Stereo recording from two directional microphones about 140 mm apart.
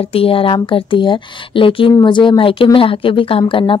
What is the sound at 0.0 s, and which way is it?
A woman's voice, 40° left (ahead or behind).